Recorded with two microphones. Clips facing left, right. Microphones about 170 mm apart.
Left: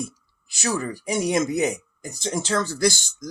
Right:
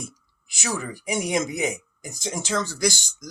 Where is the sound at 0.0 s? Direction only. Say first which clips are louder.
Left 6 dB; 20° right (ahead or behind).